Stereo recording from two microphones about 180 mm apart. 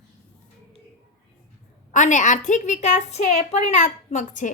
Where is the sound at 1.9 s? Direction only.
45° left (ahead or behind).